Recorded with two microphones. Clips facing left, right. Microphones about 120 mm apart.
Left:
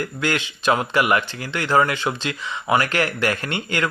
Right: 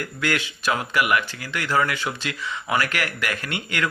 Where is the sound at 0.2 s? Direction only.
25° left (ahead or behind).